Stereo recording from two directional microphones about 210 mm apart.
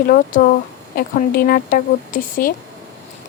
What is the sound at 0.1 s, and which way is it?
A woman's voice, 45° left (ahead or behind).